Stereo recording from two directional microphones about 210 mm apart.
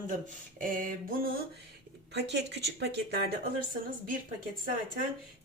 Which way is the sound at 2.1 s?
55° right (ahead or behind).